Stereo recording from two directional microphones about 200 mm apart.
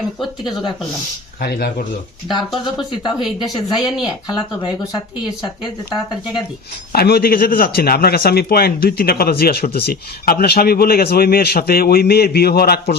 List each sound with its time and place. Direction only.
1.4 s a man's voice: 50° left (ahead or behind)
3.4 s speech: 20° left (ahead or behind)
6.9 s a man's voice: 50° left (ahead or behind)